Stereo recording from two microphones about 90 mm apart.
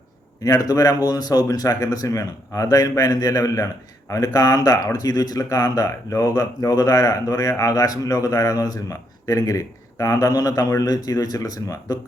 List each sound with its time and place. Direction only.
0.4 s speech: 40° left (ahead or behind)